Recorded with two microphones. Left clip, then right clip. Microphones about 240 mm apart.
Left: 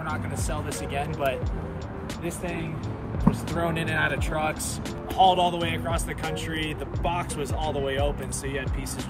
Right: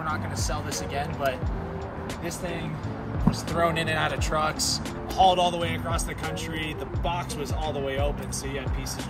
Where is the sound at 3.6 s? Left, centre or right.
Centre.